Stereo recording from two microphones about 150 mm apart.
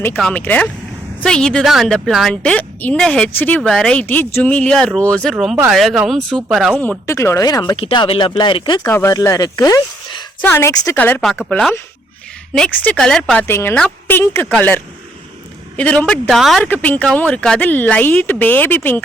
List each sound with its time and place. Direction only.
0.2 s a woman's voice: 5° left (ahead or behind)
7.1 s speech: 20° left (ahead or behind)
7.8 s speech: 35° left (ahead or behind)
8.8 s speech: 15° left (ahead or behind)
10.4 s a woman's voice: 15° left (ahead or behind)
13.5 s a woman's voice: 15° left (ahead or behind)
15.8 s speech: 10° left (ahead or behind)
16.6 s speech: 10° left (ahead or behind)